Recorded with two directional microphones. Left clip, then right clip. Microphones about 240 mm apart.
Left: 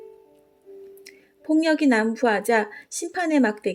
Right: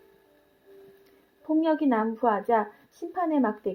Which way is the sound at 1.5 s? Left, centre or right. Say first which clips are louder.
Left 4 dB; left.